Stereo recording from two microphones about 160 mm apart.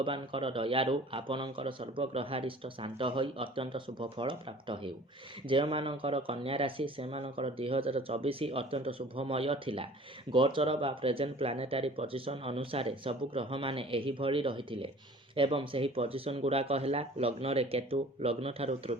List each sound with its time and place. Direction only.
0.0 s speech: 30° right (ahead or behind)